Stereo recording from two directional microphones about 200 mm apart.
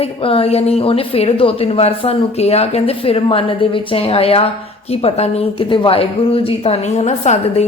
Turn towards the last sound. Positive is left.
turn(degrees=35)  # may be behind; listen again after turning